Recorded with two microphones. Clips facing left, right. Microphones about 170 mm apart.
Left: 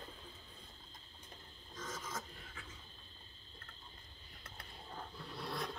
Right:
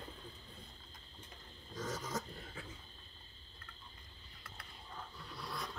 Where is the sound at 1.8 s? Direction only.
35° right (ahead or behind).